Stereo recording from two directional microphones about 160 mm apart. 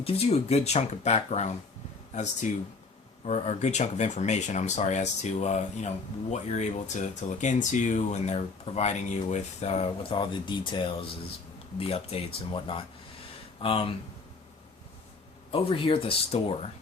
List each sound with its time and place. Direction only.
0.0 s speech: 40° left (ahead or behind)
3.2 s speech: 45° left (ahead or behind)
15.5 s speech: 35° left (ahead or behind)